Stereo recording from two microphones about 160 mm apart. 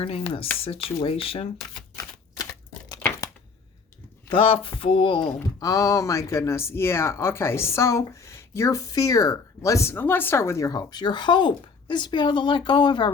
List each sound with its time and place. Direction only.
0.0 s speech: 35° left (ahead or behind)
2.4 s crumpling: 20° left (ahead or behind)
4.3 s speech: 35° left (ahead or behind)
5.5 s speech: 20° left (ahead or behind)